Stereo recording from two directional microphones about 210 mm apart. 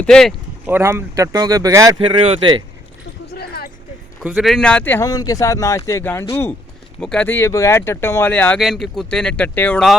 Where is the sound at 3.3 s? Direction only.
50° left (ahead or behind).